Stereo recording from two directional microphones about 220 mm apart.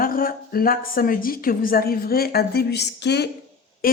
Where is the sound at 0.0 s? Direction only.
40° left (ahead or behind).